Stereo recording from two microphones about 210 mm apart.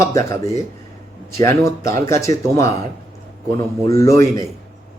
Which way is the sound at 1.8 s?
15° left (ahead or behind).